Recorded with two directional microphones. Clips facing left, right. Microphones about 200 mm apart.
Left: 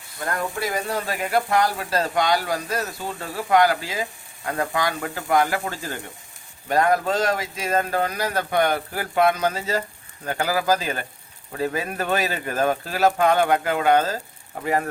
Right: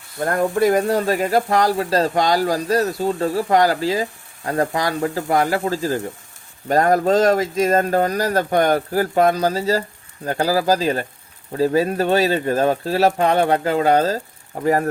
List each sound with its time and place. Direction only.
0.2 s speech: 45° right (ahead or behind); by 6.0 s 30° right (ahead or behind)
6.7 s speech: 40° right (ahead or behind)